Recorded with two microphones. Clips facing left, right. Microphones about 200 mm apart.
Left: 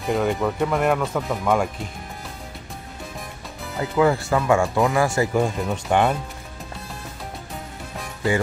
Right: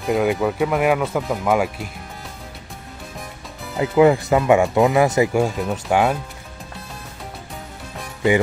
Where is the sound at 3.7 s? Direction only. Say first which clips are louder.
Right 5 dB; 20° right (ahead or behind).